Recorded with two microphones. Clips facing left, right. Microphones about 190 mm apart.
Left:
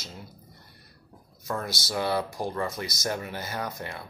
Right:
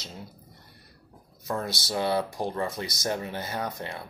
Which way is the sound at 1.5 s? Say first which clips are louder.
Right 1 dB; 25° right (ahead or behind).